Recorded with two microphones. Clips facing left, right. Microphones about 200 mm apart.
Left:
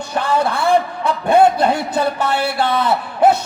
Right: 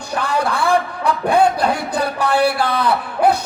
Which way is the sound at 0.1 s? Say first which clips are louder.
Left 2 dB; 25° left (ahead or behind).